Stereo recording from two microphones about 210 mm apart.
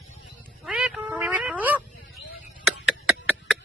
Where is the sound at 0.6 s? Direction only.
5° right (ahead or behind).